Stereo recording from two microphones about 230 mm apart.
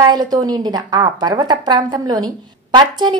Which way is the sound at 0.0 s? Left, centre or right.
Centre.